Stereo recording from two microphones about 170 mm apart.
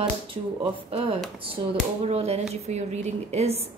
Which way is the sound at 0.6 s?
35° right (ahead or behind).